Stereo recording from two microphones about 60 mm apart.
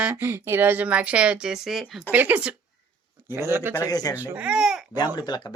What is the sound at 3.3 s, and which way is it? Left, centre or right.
Speech, right.